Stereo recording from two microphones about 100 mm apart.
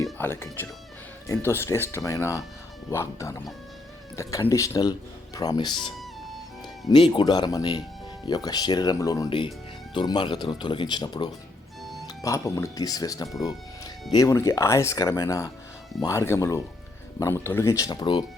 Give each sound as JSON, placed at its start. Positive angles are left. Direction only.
{"t": 0.2, "sound": "speech", "side_deg": 20}
{"t": 4.8, "sound": "speech", "side_deg": 40}
{"t": 5.5, "sound": "speech", "side_deg": 55}
{"t": 7.1, "sound": "speech", "side_deg": 45}
{"t": 9.9, "sound": "speech", "side_deg": 50}
{"t": 11.8, "sound": "music", "side_deg": 0}
{"t": 12.0, "sound": "speech", "side_deg": 30}
{"t": 13.2, "sound": "speech", "side_deg": 0}
{"t": 14.1, "sound": "speech", "side_deg": 35}